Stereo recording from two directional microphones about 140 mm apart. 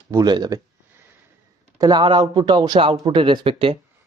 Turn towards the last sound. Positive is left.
turn(degrees=-40)  # may be behind; listen again after turning